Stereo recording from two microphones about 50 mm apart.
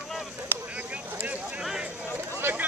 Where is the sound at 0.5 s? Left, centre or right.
Right.